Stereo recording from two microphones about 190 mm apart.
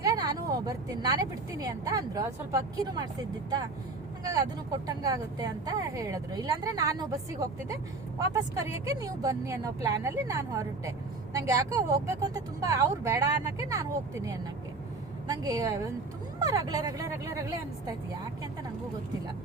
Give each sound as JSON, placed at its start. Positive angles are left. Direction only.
{"t": 0.0, "sound": "a sound", "side_deg": -20}
{"t": 1.5, "sound": "speech", "side_deg": -20}
{"t": 4.9, "sound": "speech", "side_deg": -20}
{"t": 15.3, "sound": "speech", "side_deg": -20}